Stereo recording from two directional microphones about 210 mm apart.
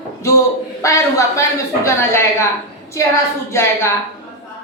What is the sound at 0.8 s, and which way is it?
A woman's voice, 15° left (ahead or behind).